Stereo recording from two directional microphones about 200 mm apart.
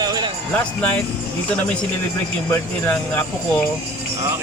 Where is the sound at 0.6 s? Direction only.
5° left (ahead or behind).